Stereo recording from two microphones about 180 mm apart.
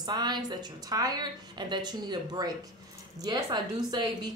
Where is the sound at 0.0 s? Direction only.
25° right (ahead or behind).